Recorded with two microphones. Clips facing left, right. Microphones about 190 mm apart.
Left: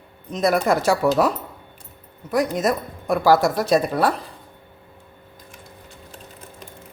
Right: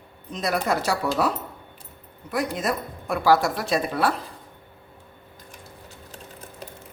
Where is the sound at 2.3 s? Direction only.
45° left (ahead or behind).